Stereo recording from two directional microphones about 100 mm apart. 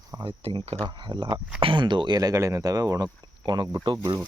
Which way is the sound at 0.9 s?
50° right (ahead or behind).